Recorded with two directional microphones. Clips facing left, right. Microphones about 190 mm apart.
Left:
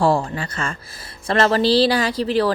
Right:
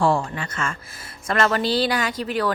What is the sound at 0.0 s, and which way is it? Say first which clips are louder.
A woman's voice: left 3 dB; 35° left (ahead or behind).